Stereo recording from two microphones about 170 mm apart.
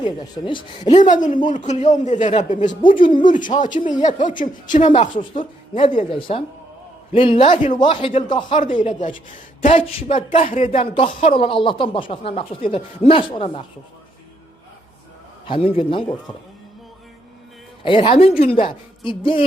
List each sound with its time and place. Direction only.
0.0 s speech: 25° left (ahead or behind)
0.9 s speech: 45° left (ahead or behind)
5.1 s speech: 30° left (ahead or behind)
7.5 s speech: 50° left (ahead or behind)
7.8 s speech: 30° left (ahead or behind)
15.4 s speech: 35° left (ahead or behind)
17.8 s speech: 30° left (ahead or behind)